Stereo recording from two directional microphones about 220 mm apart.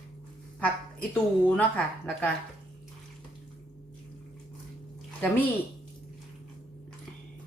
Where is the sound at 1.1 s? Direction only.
5° left (ahead or behind).